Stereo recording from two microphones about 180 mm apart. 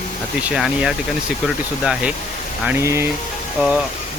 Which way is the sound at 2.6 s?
10° right (ahead or behind).